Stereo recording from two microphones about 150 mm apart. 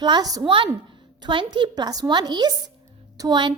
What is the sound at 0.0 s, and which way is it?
A woman's voice, 25° right (ahead or behind).